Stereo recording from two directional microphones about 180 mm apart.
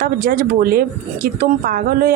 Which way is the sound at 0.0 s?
55° right (ahead or behind).